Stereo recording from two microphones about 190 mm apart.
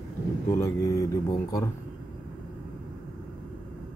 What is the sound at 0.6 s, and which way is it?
Speech, 15° left (ahead or behind).